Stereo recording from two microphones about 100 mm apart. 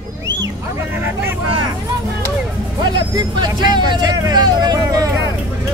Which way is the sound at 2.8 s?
45° right (ahead or behind).